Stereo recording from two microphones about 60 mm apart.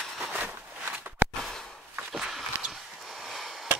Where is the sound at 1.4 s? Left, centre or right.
Centre.